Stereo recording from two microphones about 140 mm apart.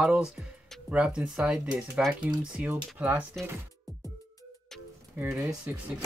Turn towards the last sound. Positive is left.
turn(degrees=-10)  # may be behind; listen again after turning